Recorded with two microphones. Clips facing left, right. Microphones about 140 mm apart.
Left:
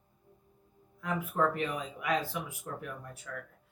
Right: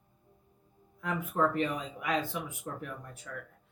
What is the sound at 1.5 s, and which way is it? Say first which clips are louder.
Speech: right 3 dB; 5° left (ahead or behind).